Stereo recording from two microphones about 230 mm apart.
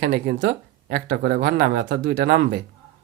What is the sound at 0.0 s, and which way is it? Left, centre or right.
Speech, right.